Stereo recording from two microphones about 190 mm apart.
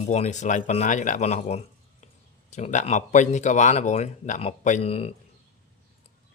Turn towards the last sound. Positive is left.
turn(degrees=30)  # may be behind; listen again after turning